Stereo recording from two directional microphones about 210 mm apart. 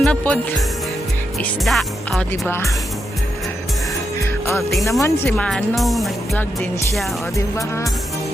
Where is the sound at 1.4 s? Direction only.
Centre (ahead or behind).